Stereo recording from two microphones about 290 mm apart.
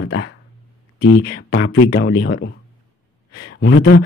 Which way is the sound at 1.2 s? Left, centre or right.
Left.